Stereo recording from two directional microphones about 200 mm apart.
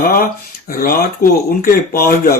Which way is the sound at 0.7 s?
45° left (ahead or behind).